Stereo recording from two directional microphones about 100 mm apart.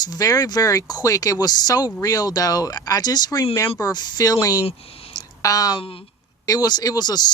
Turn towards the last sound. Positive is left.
turn(degrees=45)  # may be behind; listen again after turning